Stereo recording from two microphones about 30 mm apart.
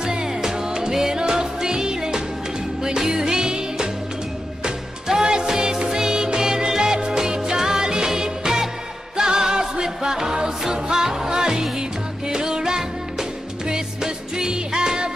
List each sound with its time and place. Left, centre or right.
0.0 s music: right
5.0 s music: centre